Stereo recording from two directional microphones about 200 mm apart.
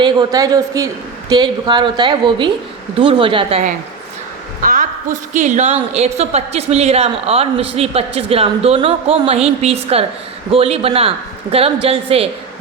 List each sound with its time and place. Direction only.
0.0 s a man's voice: 20° right (ahead or behind)
4.6 s a sound: 45° right (ahead or behind)
5.3 s a woman's voice: 35° right (ahead or behind)